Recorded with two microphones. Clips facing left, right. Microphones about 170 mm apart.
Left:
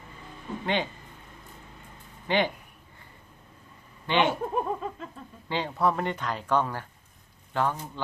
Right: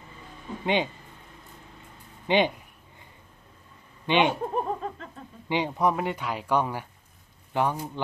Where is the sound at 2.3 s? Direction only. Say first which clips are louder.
Right 3 dB; 20° right (ahead or behind).